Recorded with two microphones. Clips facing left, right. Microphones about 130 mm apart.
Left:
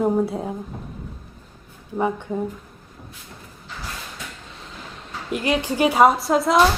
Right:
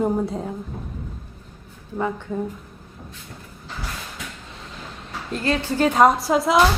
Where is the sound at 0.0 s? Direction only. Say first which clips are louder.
Left 2 dB; 5° left (ahead or behind).